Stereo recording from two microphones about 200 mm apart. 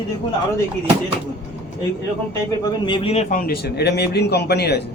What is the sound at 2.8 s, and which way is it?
A man's voice, 25° left (ahead or behind).